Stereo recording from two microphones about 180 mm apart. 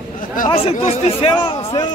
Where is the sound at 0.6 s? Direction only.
35° left (ahead or behind).